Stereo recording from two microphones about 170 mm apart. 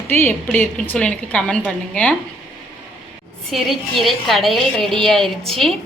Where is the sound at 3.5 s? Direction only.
Centre (ahead or behind).